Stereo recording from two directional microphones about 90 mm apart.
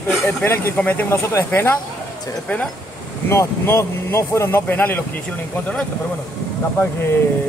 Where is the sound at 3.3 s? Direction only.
30° left (ahead or behind).